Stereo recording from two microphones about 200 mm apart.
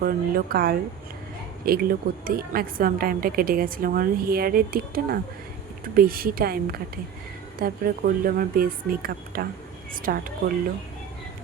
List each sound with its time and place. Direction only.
0.0 s a woman's voice: 50° right (ahead or behind)